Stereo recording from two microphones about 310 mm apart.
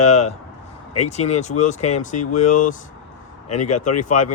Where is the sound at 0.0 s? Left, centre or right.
Left.